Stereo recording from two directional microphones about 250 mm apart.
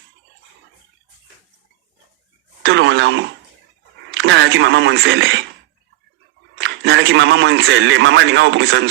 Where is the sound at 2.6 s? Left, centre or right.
Right.